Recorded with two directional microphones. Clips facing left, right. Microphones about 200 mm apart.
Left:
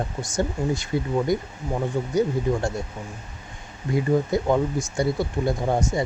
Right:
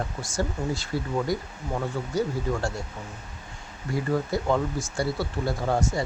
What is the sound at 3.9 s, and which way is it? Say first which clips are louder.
Speech: left 5 dB; 20° left (ahead or behind).